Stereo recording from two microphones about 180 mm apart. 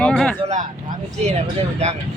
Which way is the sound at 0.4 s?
40° right (ahead or behind).